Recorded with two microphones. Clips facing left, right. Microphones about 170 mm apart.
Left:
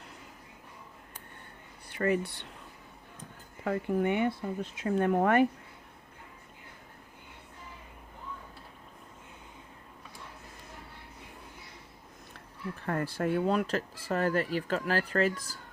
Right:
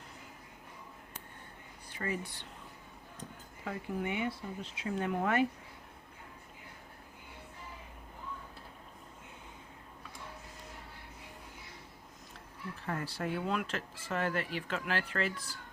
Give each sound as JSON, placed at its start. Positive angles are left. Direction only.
{"t": 1.9, "sound": "speech", "side_deg": 65}
{"t": 3.6, "sound": "speech", "side_deg": 60}
{"t": 12.8, "sound": "speech", "side_deg": 55}